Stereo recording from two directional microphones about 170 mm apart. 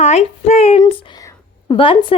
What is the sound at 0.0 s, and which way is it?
A woman's voice, 40° left (ahead or behind).